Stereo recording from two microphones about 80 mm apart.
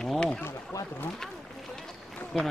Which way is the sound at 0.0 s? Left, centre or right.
Centre.